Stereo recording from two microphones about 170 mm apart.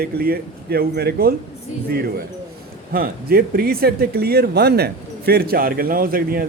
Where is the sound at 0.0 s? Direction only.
65° right (ahead or behind).